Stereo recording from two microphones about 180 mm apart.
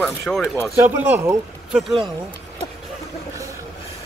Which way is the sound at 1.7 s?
Centre (ahead or behind).